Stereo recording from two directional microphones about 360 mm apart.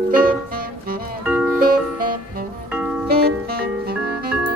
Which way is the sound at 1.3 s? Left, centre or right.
Centre.